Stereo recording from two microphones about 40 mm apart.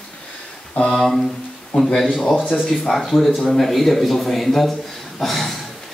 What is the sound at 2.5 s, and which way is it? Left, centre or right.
Speech, centre.